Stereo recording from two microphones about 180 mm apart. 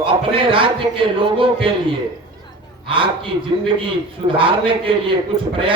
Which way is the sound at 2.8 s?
30° right (ahead or behind).